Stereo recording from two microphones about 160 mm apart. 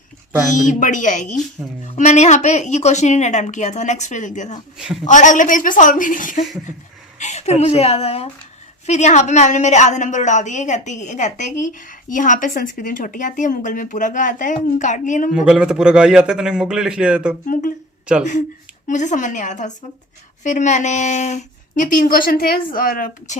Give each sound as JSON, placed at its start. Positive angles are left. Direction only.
{"t": 0.5, "sound": "a woman's voice", "side_deg": 50}
{"t": 4.8, "sound": "a man's voice", "side_deg": 0}
{"t": 5.0, "sound": "a woman's voice", "side_deg": 50}
{"t": 15.3, "sound": "a man's voice", "side_deg": -5}
{"t": 17.4, "sound": "a woman's voice", "side_deg": 60}